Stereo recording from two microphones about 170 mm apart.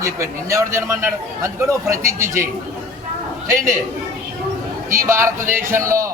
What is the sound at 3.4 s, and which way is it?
Speech, 20° right (ahead or behind).